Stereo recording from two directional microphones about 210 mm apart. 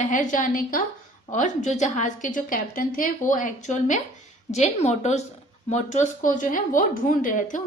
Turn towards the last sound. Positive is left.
turn(degrees=40)  # may be behind; listen again after turning